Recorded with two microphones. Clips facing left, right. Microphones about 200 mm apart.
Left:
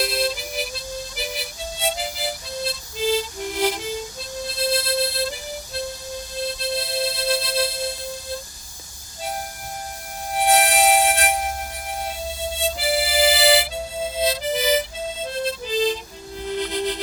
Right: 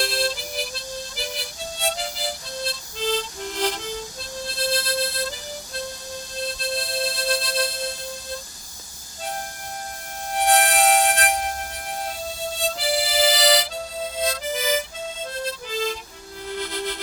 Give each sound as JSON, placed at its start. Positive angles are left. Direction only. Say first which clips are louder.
{"t": 0.0, "sound": "harmonica", "louder": "left 2 dB", "side_deg": 5}
{"t": 4.6, "sound": "music", "louder": "left 3 dB", "side_deg": 5}
{"t": 6.6, "sound": "music", "louder": "left 1 dB", "side_deg": 5}
{"t": 10.3, "sound": "music", "louder": "left 1 dB", "side_deg": 5}
{"t": 12.7, "sound": "harmonica", "louder": "left 2 dB", "side_deg": 5}
{"t": 14.0, "sound": "harmonica", "louder": "left 4 dB", "side_deg": 20}
{"t": 15.3, "sound": "music", "louder": "left 6 dB", "side_deg": 20}